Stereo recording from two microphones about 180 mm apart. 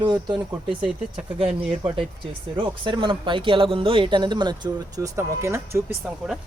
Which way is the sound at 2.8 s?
25° right (ahead or behind).